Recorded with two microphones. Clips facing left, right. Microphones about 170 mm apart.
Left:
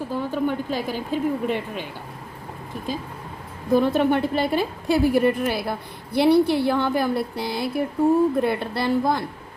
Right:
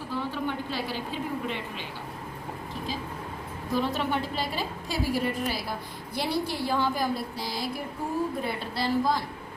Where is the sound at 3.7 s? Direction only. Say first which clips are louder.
Left 9 dB; 55° left (ahead or behind).